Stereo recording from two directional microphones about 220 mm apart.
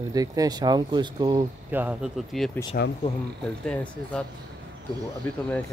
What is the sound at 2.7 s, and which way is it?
Speech, 45° left (ahead or behind).